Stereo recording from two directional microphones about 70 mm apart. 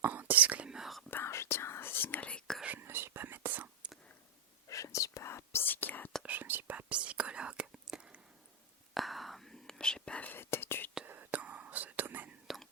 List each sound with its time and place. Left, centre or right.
0.0 s whispering: right
0.7 s whispering: centre
1.1 s whispering: left; by 2.4 s centre
2.6 s whispering: right
4.7 s whispering: left
5.6 s whispering: left
6.2 s whispering: right; by 8.2 s centre
9.0 s whispering: centre
10.2 s whispering: left
10.4 s whispering: left
11.0 s whispering: right
12.5 s whispering: centre